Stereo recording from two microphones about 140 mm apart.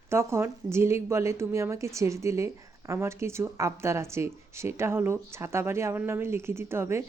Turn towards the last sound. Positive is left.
turn(degrees=-20)  # may be behind; listen again after turning